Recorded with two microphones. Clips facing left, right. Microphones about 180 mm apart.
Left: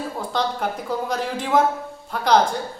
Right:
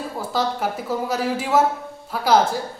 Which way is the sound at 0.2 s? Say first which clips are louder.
Right 2 dB; 5° right (ahead or behind).